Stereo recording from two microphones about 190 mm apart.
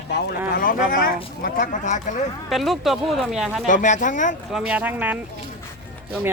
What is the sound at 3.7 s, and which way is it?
Speech, 40° left (ahead or behind).